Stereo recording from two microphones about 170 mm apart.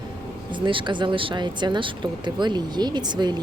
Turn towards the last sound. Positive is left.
turn(degrees=-25)  # may be behind; listen again after turning